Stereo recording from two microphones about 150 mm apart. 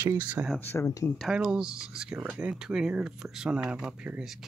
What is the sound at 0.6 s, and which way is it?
Speech, 20° left (ahead or behind).